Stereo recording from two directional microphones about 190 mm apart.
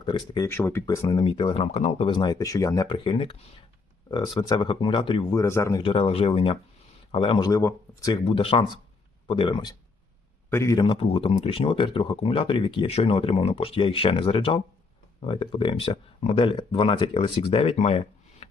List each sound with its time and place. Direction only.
0.0 s speech: 25° left (ahead or behind)
0.4 s speech: 15° left (ahead or behind)
5.8 s speech: 30° left (ahead or behind)